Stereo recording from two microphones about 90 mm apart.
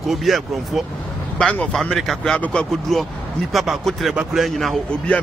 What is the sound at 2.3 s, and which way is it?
Speech, 15° left (ahead or behind).